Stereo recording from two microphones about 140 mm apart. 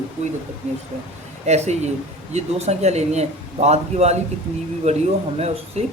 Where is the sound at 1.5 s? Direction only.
55° right (ahead or behind).